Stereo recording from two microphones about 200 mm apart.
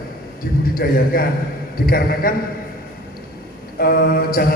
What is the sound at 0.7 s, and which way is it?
A man's voice, 45° left (ahead or behind).